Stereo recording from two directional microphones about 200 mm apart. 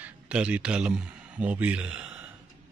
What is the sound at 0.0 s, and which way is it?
Speech, 5° right (ahead or behind).